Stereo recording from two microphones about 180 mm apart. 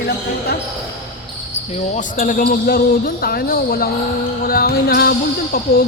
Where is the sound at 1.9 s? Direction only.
45° left (ahead or behind).